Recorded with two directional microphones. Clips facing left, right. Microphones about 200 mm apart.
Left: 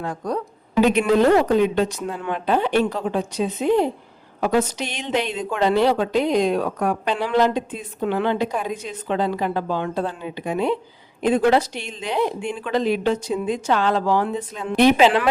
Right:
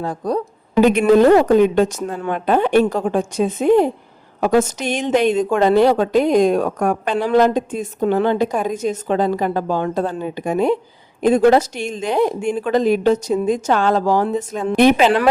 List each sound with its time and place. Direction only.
0.0 s a woman's voice: 35° right (ahead or behind)
0.8 s a woman's voice: 50° right (ahead or behind)